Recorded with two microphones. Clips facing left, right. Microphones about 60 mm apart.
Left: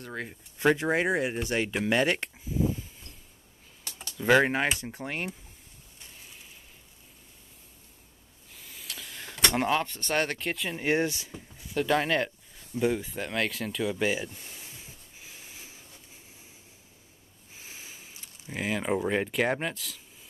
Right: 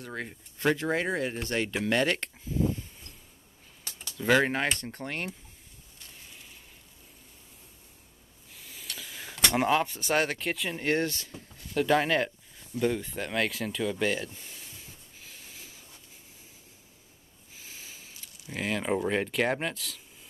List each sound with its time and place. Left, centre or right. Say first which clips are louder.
0.0 s speech: even; centre
0.6 s speech: left 3 dB; centre
4.2 s speech: left 2 dB; centre
6.2 s a sound: even; centre
8.5 s a sound: even; centre
10.9 s speech: left 2 dB; centre
15.1 s snort: left 1 dB; centre
17.6 s a sound: left 1 dB; left
18.5 s speech: even; centre